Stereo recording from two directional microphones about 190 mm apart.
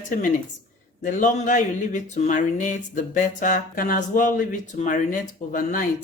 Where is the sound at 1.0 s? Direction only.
45° left (ahead or behind).